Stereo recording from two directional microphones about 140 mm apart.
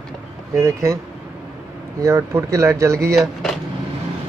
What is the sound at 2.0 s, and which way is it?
Speech, 20° right (ahead or behind).